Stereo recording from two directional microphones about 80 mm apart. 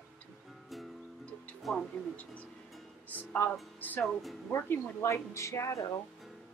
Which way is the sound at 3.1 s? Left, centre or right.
Left.